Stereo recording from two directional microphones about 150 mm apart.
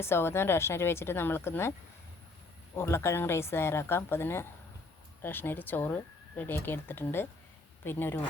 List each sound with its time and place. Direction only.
0.0 s speech: 15° left (ahead or behind)
2.7 s speech: 15° left (ahead or behind)